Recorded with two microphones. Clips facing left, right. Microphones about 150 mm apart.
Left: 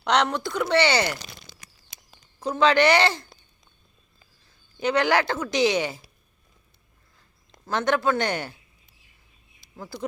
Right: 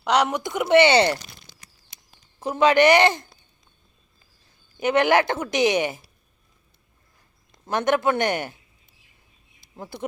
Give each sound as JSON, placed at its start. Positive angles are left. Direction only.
{"t": 0.0, "sound": "speech", "side_deg": -10}
{"t": 1.2, "sound": "crumpling", "side_deg": 90}
{"t": 2.4, "sound": "speech", "side_deg": -20}
{"t": 4.8, "sound": "speech", "side_deg": -20}
{"t": 7.6, "sound": "speech", "side_deg": -20}
{"t": 9.7, "sound": "speech", "side_deg": -25}